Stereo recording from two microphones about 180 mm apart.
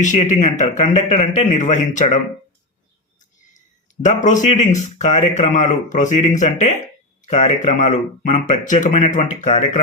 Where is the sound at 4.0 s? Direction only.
45° left (ahead or behind).